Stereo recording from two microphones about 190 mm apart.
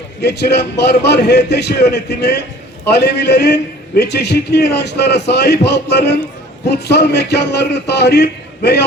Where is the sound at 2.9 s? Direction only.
60° left (ahead or behind).